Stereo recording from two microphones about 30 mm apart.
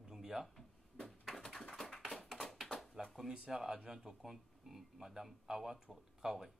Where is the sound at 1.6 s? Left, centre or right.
Left.